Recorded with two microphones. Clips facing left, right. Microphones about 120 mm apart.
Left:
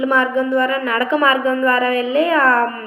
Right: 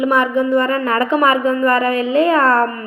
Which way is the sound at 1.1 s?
20° right (ahead or behind).